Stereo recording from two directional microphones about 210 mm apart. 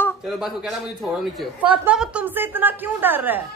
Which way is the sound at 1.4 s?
5° right (ahead or behind).